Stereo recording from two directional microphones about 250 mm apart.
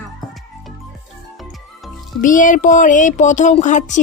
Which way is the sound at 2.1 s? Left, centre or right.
Left.